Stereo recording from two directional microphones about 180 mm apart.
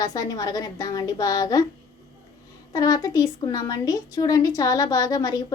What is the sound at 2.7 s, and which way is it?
A woman's voice, 20° left (ahead or behind).